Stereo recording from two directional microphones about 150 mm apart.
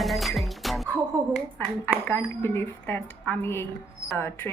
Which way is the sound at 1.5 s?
15° left (ahead or behind).